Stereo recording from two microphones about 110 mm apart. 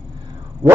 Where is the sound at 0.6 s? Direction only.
35° right (ahead or behind).